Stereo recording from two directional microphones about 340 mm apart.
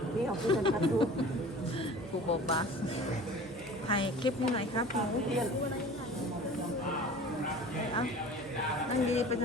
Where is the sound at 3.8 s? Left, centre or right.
Centre.